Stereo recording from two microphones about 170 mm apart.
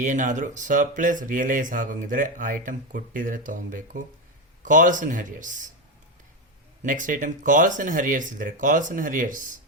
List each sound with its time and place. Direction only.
0.0 s speech: 50° right (ahead or behind)
6.8 s speech: 50° right (ahead or behind)